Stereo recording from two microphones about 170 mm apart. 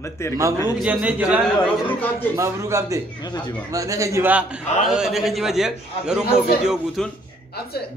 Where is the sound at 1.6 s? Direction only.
10° left (ahead or behind).